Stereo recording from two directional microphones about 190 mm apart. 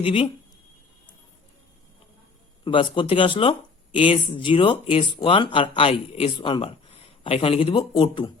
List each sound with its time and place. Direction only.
0.0 s speech: 30° left (ahead or behind)
2.6 s speech: 25° left (ahead or behind)